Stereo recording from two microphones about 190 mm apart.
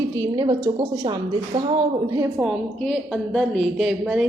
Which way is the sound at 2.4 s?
Centre (ahead or behind).